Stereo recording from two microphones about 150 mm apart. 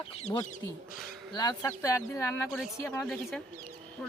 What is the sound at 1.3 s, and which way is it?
Speech, 25° left (ahead or behind).